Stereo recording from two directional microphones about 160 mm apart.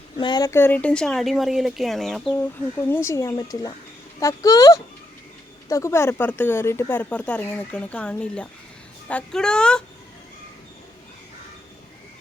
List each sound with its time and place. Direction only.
0.2 s speech: 25° left (ahead or behind); by 2.4 s centre (ahead or behind)
2.9 s speech: 20° left (ahead or behind)